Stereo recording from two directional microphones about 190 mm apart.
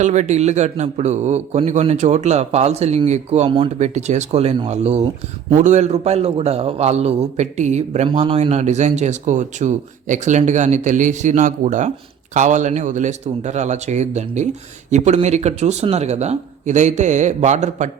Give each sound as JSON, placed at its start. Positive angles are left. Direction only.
{"t": 0.0, "sound": "a man's voice", "side_deg": -40}